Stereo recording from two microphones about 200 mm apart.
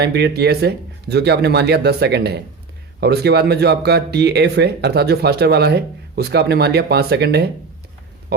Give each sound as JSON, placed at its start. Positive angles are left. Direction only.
{"t": 0.0, "sound": "speech", "side_deg": -55}